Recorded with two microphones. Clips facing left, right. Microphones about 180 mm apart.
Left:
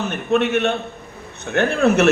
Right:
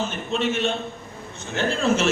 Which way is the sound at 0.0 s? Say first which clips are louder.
Left 6 dB; 60° left (ahead or behind).